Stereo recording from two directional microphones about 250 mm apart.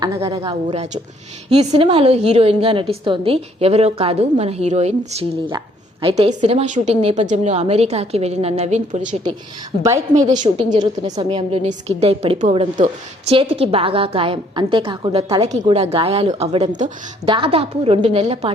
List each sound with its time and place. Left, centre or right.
0.0 s a woman's voice: centre; by 9.1 s right
10.1 s a woman's voice: centre
11.1 s a woman's voice: centre